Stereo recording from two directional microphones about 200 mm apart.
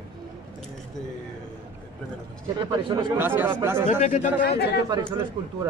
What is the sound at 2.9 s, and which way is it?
Speech, 25° right (ahead or behind).